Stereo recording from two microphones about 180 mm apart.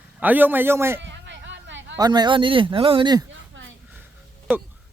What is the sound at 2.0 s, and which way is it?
Speech, 25° right (ahead or behind).